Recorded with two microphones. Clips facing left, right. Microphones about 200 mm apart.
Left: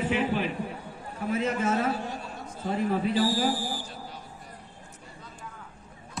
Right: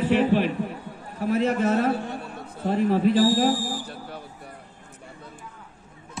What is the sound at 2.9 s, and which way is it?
Speech, 45° right (ahead or behind).